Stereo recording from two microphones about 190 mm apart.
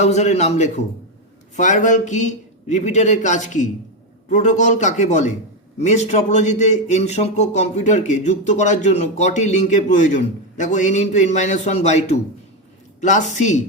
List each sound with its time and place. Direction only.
0.0 s a man's voice: 35° left (ahead or behind)